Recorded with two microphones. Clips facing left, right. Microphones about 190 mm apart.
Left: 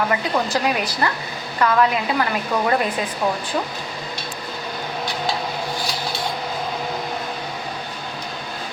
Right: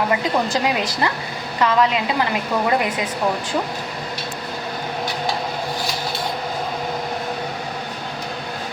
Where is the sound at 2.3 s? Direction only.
20° right (ahead or behind).